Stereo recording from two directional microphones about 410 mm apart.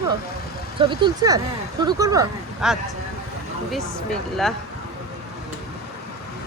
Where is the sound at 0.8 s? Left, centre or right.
Centre.